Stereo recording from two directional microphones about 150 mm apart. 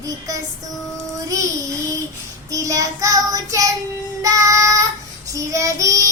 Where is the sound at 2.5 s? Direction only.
20° right (ahead or behind).